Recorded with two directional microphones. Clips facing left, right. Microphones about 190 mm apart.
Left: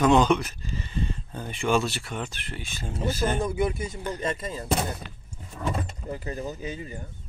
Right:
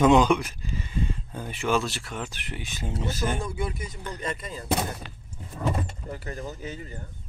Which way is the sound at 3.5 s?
20° left (ahead or behind).